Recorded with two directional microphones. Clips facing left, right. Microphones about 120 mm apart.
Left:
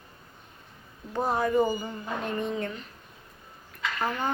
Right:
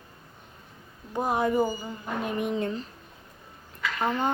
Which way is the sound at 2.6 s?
35° right (ahead or behind).